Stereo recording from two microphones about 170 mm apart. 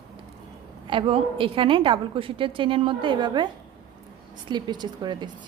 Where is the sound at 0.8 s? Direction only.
30° right (ahead or behind).